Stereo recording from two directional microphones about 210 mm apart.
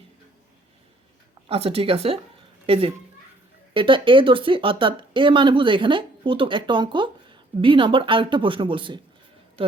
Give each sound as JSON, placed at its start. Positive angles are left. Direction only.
{"t": 1.5, "sound": "a child's voice", "side_deg": -30}